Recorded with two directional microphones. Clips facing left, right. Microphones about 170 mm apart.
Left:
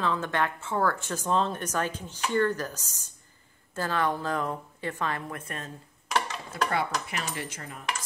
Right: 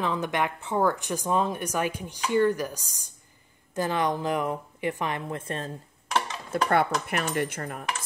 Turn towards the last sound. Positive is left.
turn(degrees=-55)  # may be behind; listen again after turning